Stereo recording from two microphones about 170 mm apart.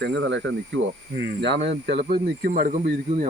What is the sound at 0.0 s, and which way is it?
Speech, 90° right.